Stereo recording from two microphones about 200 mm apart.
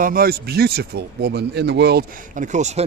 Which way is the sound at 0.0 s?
45° right (ahead or behind).